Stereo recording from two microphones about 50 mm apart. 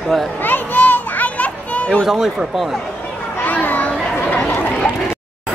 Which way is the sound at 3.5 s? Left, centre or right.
Left.